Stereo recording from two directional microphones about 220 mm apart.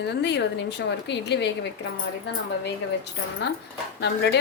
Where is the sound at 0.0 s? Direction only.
50° left (ahead or behind).